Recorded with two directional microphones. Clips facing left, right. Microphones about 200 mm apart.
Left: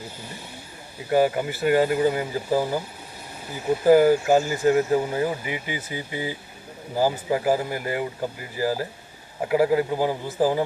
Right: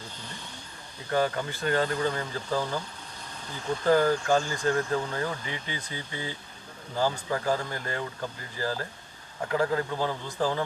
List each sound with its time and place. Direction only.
0.9 s a sound: 10° left (ahead or behind)
1.4 s speech: 10° left (ahead or behind)
4.7 s speech: 20° left (ahead or behind)